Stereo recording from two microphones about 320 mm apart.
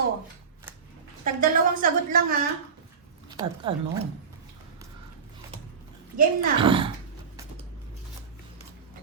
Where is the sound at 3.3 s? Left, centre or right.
Centre.